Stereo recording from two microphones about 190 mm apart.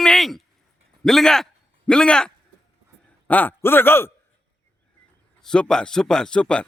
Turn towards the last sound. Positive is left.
turn(degrees=5)  # may be behind; listen again after turning